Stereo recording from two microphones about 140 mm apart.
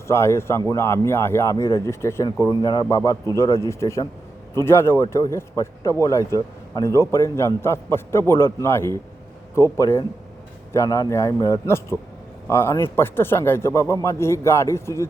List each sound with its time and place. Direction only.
0.1 s a man's voice: 20° left (ahead or behind)